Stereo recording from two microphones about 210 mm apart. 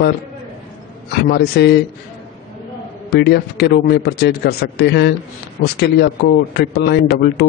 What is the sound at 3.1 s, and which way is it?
A man's voice, 50° left (ahead or behind).